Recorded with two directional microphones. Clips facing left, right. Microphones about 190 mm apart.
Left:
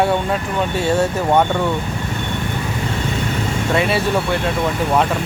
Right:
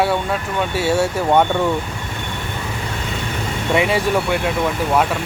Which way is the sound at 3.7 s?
15° right (ahead or behind).